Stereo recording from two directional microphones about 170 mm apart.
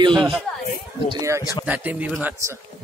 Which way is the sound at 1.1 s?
20° right (ahead or behind).